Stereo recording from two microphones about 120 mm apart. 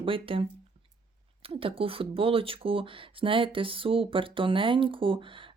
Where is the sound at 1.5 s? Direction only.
50° right (ahead or behind).